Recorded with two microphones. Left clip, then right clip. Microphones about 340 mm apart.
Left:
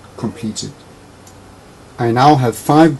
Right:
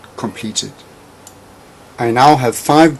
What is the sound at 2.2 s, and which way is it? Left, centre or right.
Speech, left.